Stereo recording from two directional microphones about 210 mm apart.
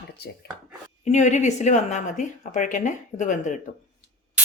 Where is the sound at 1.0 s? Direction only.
35° left (ahead or behind).